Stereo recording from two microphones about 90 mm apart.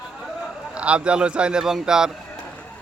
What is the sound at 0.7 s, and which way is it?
Speech, 10° right (ahead or behind).